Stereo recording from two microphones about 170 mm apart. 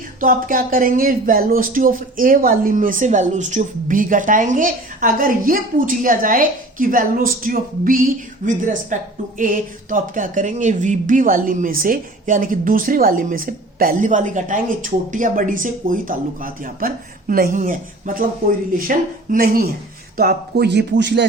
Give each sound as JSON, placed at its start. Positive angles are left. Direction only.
{"t": 0.2, "sound": "speech", "side_deg": -55}
{"t": 20.1, "sound": "a man's voice", "side_deg": -70}